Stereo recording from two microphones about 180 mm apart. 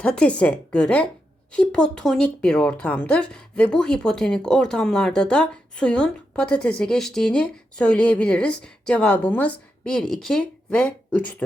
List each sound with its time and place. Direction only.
0.0 s speech: 5° left (ahead or behind)